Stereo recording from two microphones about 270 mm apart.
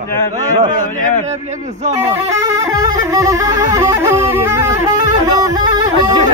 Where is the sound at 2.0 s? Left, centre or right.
Centre.